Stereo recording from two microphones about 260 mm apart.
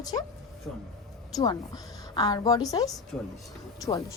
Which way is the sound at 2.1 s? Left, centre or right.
Centre.